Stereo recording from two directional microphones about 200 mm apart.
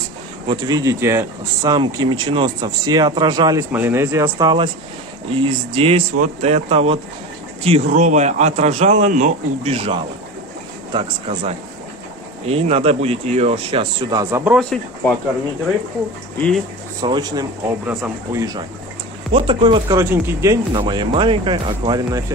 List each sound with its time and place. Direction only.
0.5 s speech: 20° right (ahead or behind)
3.7 s speech: 10° right (ahead or behind)
4.4 s a man's voice: 25° right (ahead or behind)
14.3 s speech: 5° right (ahead or behind)
16.3 s speech: 5° left (ahead or behind)
17.0 s speech: 20° right (ahead or behind)
20.7 s speech: 25° right (ahead or behind)